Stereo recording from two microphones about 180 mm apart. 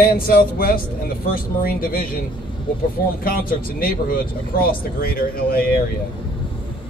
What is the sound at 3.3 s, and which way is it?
Speech, 55° left (ahead or behind).